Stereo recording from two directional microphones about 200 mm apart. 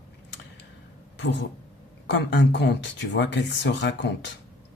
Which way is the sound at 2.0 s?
60° left (ahead or behind).